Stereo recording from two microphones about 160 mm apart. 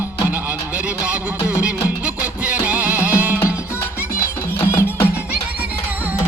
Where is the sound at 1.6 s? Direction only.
10° right (ahead or behind).